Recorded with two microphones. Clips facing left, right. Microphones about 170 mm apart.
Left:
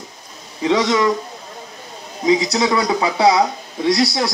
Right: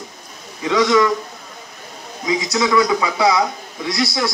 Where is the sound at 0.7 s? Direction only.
30° left (ahead or behind).